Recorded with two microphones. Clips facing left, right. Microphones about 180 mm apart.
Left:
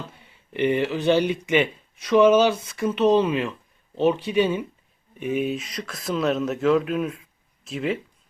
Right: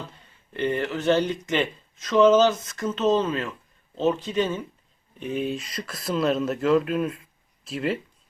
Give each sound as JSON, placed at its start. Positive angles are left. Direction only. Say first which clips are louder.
{"t": 0.2, "sound": "speech", "louder": "left 4 dB", "side_deg": 15}